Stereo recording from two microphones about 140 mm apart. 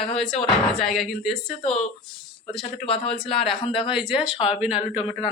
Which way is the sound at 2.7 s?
45° left (ahead or behind).